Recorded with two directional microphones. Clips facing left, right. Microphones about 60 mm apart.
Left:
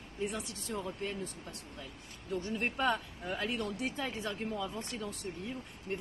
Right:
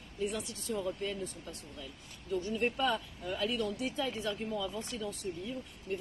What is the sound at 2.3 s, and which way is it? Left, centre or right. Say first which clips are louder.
Speech: right 2 dB; left.